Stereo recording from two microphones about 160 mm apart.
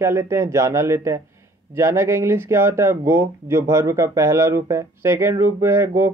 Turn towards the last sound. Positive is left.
turn(degrees=-15)  # may be behind; listen again after turning